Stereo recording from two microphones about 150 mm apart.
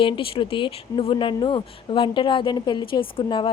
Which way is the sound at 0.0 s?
35° left (ahead or behind).